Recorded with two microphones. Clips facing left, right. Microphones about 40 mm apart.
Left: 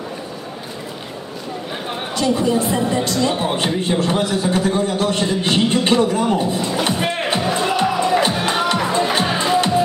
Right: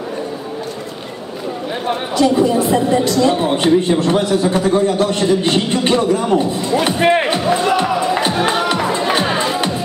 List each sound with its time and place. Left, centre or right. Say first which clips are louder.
1.9 s speech: right 5 dB; centre
7.2 s music: right 4 dB; centre